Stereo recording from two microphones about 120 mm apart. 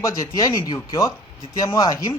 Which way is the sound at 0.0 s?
30° left (ahead or behind).